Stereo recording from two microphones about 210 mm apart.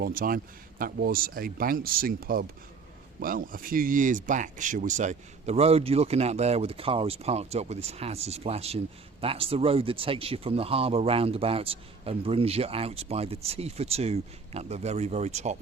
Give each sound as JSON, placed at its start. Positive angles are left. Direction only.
{"t": 0.0, "sound": "speech", "side_deg": -45}